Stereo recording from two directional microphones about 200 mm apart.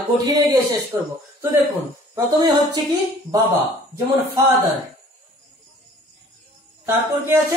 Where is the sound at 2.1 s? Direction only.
20° right (ahead or behind).